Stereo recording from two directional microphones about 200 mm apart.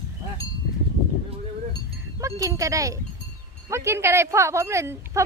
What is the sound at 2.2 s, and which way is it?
A woman's voice, 15° right (ahead or behind).